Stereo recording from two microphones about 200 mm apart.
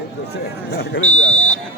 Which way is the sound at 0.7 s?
60° left (ahead or behind).